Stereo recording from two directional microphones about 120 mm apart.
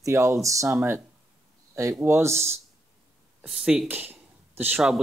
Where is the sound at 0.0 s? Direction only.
25° right (ahead or behind).